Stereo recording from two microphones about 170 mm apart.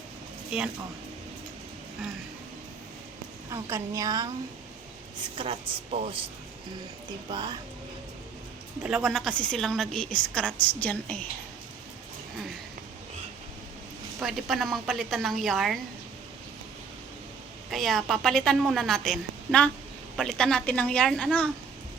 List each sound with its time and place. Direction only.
3.5 s speech: 20° right (ahead or behind)
5.4 s speech: 30° right (ahead or behind)
7.3 s speech: 25° right (ahead or behind)
8.8 s a woman's voice: centre (ahead or behind)
14.2 s a woman's voice: centre (ahead or behind)
17.7 s a woman's voice: centre (ahead or behind)